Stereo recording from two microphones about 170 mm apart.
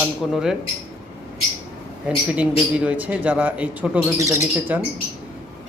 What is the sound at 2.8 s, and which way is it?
A man's voice, 10° right (ahead or behind).